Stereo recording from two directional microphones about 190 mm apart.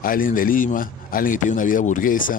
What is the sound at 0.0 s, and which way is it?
A man's voice, 45° left (ahead or behind).